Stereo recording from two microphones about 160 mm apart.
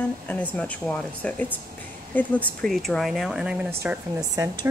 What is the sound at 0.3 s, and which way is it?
Speech, 10° left (ahead or behind).